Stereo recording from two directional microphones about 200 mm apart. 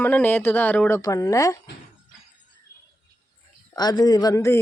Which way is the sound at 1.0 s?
20° left (ahead or behind).